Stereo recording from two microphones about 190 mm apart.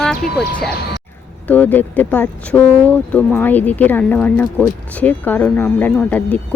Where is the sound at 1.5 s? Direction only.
10° left (ahead or behind).